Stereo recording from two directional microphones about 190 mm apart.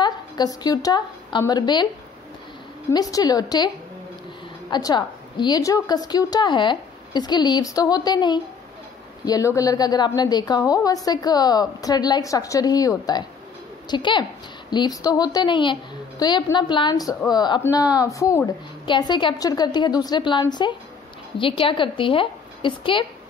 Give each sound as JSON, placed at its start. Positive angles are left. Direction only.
{"t": 0.0, "sound": "speech", "side_deg": 20}
{"t": 2.9, "sound": "a woman's voice", "side_deg": 20}